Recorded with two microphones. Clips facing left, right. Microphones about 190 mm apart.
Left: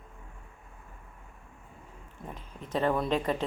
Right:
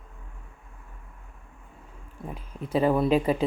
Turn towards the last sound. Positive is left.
turn(degrees=-10)  # may be behind; listen again after turning